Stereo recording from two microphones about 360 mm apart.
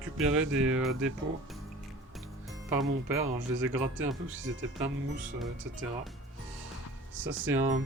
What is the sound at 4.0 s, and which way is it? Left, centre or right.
Speech, right.